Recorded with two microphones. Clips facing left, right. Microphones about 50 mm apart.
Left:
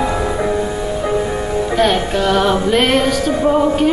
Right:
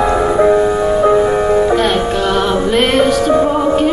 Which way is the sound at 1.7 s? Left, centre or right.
Centre.